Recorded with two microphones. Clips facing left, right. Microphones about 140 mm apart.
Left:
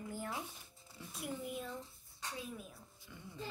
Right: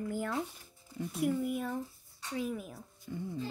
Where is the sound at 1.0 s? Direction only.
55° right (ahead or behind).